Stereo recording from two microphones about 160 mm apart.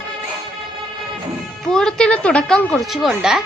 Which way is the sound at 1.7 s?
5° left (ahead or behind).